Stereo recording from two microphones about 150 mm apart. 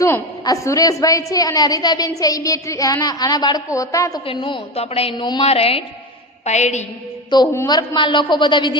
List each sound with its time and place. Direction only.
0.0 s a woman's voice: 20° left (ahead or behind)
4.3 s a woman's voice: 35° left (ahead or behind)
5.1 s a woman's voice: 30° left (ahead or behind)
5.5 s a woman's voice: 40° left (ahead or behind)
7.7 s a woman's voice: 30° left (ahead or behind)